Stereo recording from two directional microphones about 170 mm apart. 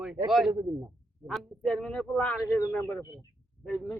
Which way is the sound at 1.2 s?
Centre (ahead or behind).